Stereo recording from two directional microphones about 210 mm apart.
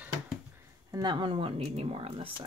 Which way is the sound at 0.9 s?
20° right (ahead or behind).